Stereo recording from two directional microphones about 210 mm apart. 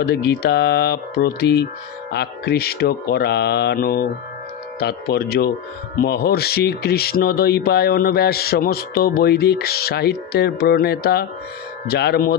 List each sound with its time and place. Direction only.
0.0 s speech: 50° left (ahead or behind)